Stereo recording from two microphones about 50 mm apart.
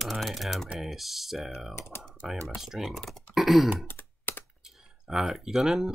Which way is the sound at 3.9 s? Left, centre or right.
Left.